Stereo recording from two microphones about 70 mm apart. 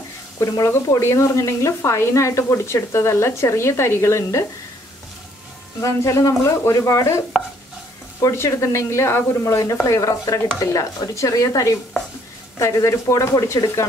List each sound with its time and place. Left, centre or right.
0.4 s speech: left
5.8 s speech: left
8.2 s speech: left